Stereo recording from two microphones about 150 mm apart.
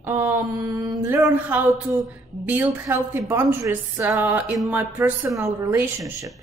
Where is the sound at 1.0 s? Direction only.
15° right (ahead or behind).